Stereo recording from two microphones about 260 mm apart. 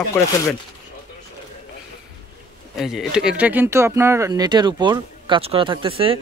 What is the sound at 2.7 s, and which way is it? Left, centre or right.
A man's voice, centre.